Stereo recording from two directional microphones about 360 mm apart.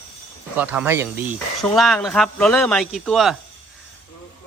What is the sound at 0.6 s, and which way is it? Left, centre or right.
Speech, centre.